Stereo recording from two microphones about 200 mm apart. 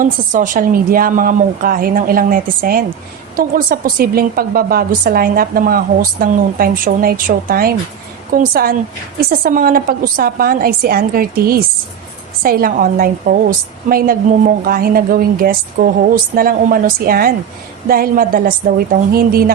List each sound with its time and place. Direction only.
0.0 s a woman's voice: 40° right (ahead or behind)